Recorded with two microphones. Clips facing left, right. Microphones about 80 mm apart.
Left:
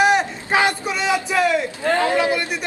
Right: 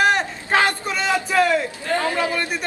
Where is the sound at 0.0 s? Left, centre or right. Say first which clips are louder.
Left 2 dB; centre.